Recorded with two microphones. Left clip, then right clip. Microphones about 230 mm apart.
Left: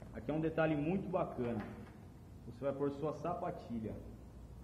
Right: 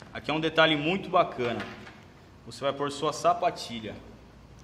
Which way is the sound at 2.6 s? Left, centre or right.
Right.